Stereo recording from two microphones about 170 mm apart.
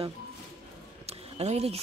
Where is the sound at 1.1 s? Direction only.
40° right (ahead or behind).